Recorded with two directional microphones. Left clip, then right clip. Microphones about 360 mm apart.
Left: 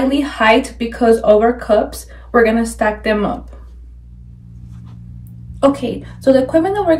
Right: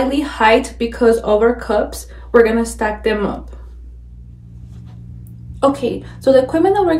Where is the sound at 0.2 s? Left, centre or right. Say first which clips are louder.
Right 1 dB; centre.